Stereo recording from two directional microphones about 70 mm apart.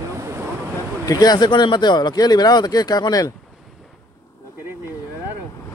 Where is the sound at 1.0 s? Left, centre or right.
Left.